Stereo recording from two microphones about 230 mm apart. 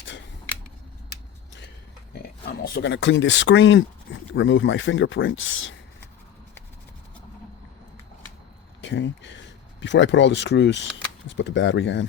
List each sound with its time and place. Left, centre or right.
2.4 s speech: left
8.8 s speech: left